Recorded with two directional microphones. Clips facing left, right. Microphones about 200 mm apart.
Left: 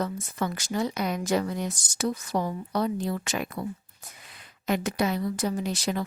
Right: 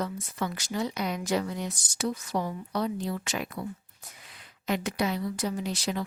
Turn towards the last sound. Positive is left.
turn(degrees=50)  # may be behind; listen again after turning